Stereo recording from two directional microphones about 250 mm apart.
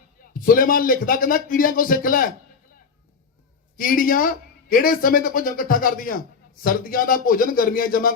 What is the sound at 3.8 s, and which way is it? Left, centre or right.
A man's voice, left.